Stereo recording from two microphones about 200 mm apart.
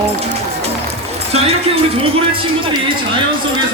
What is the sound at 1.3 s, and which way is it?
Speech, 30° right (ahead or behind).